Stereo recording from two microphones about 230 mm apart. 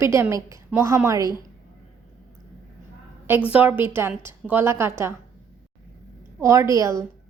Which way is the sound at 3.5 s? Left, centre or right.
Centre.